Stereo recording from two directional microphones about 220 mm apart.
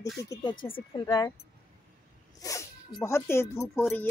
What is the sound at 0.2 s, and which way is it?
Speech, 15° left (ahead or behind).